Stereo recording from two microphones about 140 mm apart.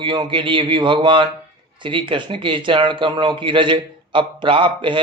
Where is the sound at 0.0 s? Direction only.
35° right (ahead or behind).